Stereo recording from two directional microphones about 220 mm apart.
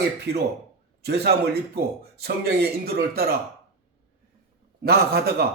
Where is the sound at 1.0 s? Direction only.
50° right (ahead or behind).